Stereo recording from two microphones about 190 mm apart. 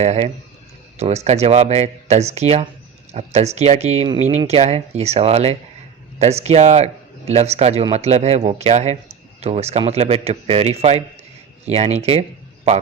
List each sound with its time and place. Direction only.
0.0 s a man's voice: 35° right (ahead or behind)